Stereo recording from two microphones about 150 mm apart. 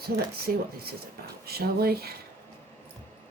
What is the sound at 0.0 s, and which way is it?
Speech, 90° right.